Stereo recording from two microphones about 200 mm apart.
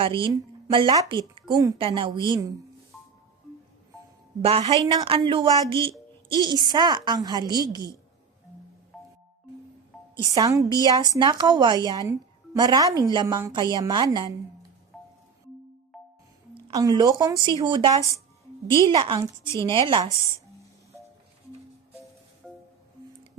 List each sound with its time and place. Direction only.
0.0 s a woman's voice: 25° right (ahead or behind)
2.9 s music: centre (ahead or behind)
4.6 s a woman's voice: 20° right (ahead or behind)
10.2 s a woman's voice: 15° right (ahead or behind)
14.9 s music: centre (ahead or behind)
16.6 s a woman's voice: 20° right (ahead or behind)